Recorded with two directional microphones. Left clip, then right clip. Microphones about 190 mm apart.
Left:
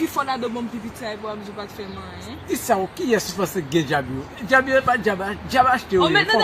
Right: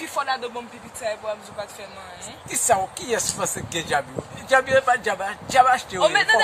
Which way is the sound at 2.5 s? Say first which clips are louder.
Even; 10° right (ahead or behind).